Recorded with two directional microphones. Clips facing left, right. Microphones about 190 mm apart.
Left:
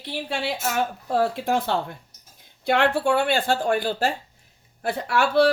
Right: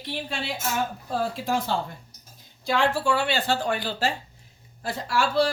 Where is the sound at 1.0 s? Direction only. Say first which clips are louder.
Left 5 dB; 65° left (ahead or behind).